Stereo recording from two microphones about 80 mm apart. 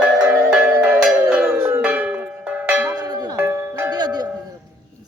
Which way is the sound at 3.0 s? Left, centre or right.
Right.